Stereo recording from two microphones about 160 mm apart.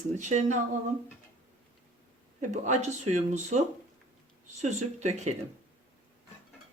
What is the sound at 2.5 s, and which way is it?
Speech, 45° right (ahead or behind).